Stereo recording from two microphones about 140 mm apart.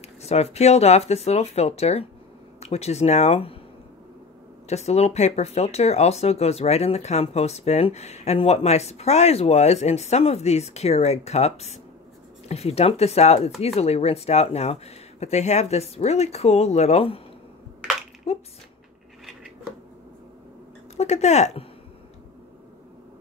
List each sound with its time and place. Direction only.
0.2 s speech: 50° left (ahead or behind)
4.6 s speech: 50° left (ahead or behind)
18.3 s speech: 45° left (ahead or behind)
20.9 s speech: 50° left (ahead or behind)